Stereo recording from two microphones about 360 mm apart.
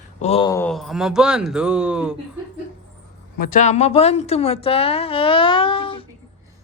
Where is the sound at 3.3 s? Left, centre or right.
Left.